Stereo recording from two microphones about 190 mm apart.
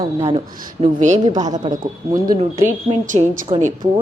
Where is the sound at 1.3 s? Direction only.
20° right (ahead or behind).